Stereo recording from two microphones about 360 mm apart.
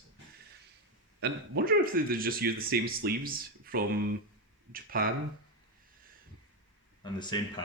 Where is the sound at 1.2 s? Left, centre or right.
Right.